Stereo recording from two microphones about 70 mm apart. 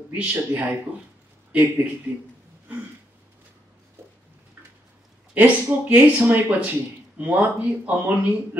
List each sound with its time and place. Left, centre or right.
0.1 s speech: right
5.3 s speech: right